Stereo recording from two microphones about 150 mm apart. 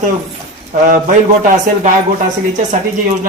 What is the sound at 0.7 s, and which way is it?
A man's voice, 60° right (ahead or behind).